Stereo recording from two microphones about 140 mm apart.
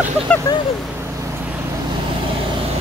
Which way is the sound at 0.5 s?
25° left (ahead or behind).